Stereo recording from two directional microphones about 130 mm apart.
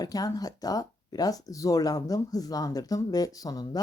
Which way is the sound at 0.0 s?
30° left (ahead or behind).